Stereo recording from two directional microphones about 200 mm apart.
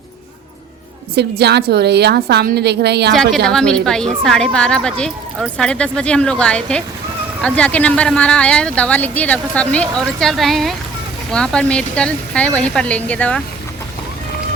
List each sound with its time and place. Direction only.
1.1 s a woman's voice: 55° right (ahead or behind)
3.1 s a woman's voice: centre (ahead or behind)